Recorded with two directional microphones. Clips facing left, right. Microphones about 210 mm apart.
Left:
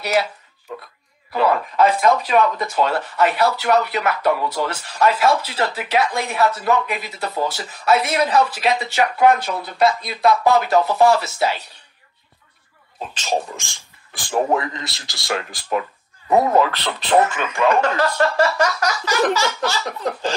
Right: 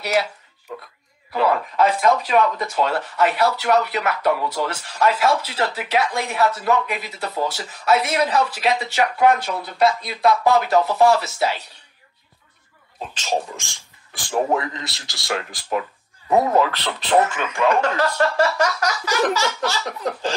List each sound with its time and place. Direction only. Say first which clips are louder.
0.0 s speech: left 1 dB; 55° left (ahead or behind)
1.3 s speech: left 1 dB; 50° left (ahead or behind)
14.3 s speech: left 1 dB; 70° left (ahead or behind); by 15.8 s 90° left
16.4 s speech: left 1 dB; 55° left (ahead or behind); by 18.5 s 90° left
18.7 s a sound: left 1 dB; 55° left (ahead or behind)
19.4 s speech: left 1 dB; 90° left